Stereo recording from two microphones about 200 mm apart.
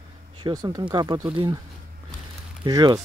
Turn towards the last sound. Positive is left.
turn(degrees=-20)  # may be behind; listen again after turning